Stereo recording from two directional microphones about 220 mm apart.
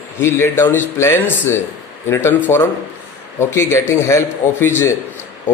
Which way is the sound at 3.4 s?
10° left (ahead or behind).